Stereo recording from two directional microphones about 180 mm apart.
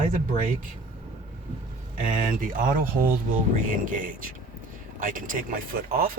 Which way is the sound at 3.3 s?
50° right (ahead or behind).